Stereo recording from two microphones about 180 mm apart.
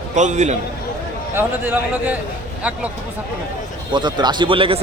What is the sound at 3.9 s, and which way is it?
Speech, 25° right (ahead or behind).